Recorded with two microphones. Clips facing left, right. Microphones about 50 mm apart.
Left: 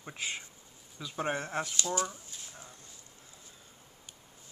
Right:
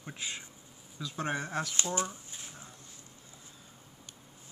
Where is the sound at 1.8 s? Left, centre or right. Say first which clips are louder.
Left 1 dB; right.